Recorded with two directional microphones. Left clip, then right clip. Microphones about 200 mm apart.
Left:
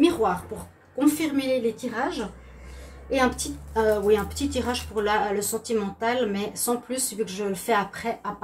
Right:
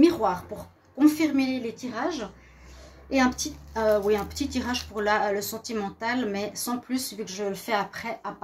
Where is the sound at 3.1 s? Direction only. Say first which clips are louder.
Left 1 dB; 50° right (ahead or behind).